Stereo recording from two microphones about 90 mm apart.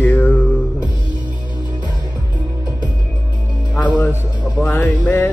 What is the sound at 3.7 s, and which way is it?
Speech, 15° left (ahead or behind).